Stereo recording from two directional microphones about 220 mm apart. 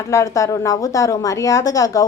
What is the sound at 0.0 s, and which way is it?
A woman's voice, 10° left (ahead or behind).